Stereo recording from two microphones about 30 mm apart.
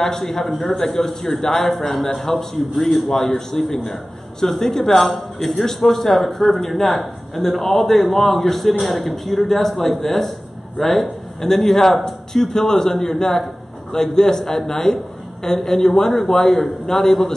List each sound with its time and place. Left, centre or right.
0.0 s a man's voice: centre